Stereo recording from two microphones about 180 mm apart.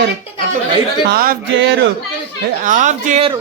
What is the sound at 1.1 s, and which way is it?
Music, 55° right (ahead or behind).